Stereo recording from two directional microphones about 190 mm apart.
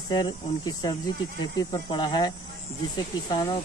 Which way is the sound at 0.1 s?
20° left (ahead or behind).